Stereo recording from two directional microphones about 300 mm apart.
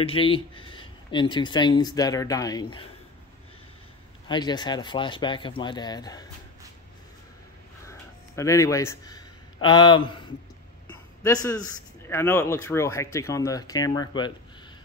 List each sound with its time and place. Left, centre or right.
0.0 s a man's voice: centre
4.3 s a man's voice: centre
7.8 s a sound: centre
10.9 s a man's voice: centre